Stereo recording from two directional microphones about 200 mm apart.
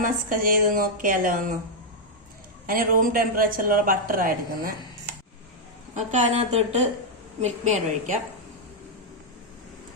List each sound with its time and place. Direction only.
0.0 s speech: 45° right (ahead or behind)
2.6 s speech: 45° right (ahead or behind)
5.9 s a woman's voice: 35° right (ahead or behind)